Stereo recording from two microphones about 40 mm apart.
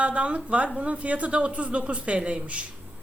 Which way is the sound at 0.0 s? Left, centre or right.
Right.